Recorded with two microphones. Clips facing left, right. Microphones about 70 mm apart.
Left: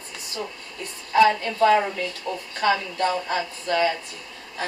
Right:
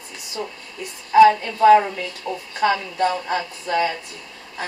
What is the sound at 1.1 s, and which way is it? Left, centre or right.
A woman's voice, centre.